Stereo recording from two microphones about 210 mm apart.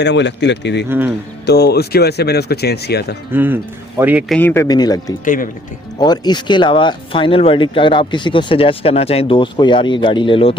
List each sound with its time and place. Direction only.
0.0 s speech: 55° left (ahead or behind)
0.9 s speech: 10° right (ahead or behind)
1.5 s speech: 50° left (ahead or behind)
3.3 s speech: 10° right (ahead or behind)
4.3 s speech: 10° left (ahead or behind)
5.2 s speech: 40° left (ahead or behind)
6.0 s speech: 20° left (ahead or behind)